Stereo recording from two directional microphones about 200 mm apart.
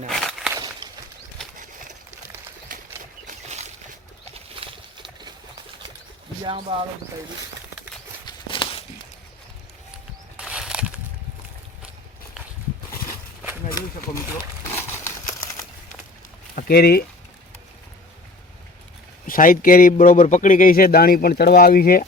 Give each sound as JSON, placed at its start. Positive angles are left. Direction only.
{"t": 0.2, "sound": "walk", "side_deg": 0}
{"t": 0.5, "sound": "walk", "side_deg": -20}
{"t": 2.7, "sound": "a sound", "side_deg": -40}
{"t": 6.4, "sound": "speech", "side_deg": -25}
{"t": 8.2, "sound": "a sound", "side_deg": 25}
{"t": 10.3, "sound": "a sound", "side_deg": -5}
{"t": 14.8, "sound": "crumpling", "side_deg": 15}
{"t": 16.6, "sound": "speech", "side_deg": 50}
{"t": 19.3, "sound": "speech", "side_deg": 45}